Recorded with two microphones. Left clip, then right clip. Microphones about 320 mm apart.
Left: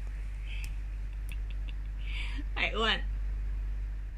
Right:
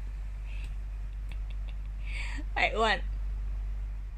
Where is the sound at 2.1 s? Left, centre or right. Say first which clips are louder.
Right 4 dB; centre.